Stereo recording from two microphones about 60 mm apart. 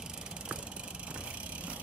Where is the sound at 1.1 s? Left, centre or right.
Right.